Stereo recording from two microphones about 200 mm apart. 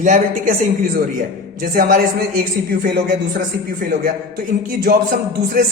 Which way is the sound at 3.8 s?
45° right (ahead or behind).